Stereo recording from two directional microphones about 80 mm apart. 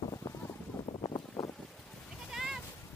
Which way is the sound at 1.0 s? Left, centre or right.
Left.